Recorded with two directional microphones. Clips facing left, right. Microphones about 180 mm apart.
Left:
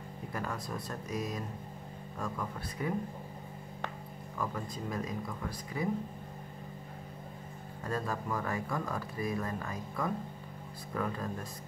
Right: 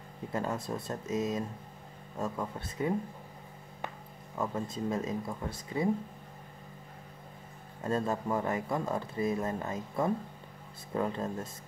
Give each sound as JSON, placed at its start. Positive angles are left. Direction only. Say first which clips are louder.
{"t": 0.3, "sound": "speech", "louder": "right 5 dB", "side_deg": -25}
{"t": 4.4, "sound": "speech", "louder": "right 4 dB", "side_deg": -25}
{"t": 7.8, "sound": "speech", "louder": "right 5 dB", "side_deg": -25}